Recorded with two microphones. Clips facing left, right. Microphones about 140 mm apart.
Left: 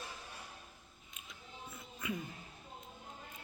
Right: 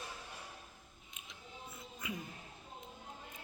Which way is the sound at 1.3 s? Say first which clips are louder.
Left 1 dB; 20° right (ahead or behind).